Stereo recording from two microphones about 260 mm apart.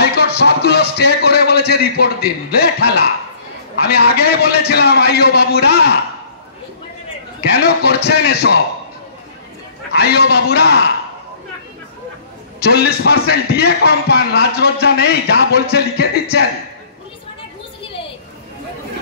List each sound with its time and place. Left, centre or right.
0.0 s speech: left
7.5 s speech: left
9.9 s speech: left
12.5 s speech: left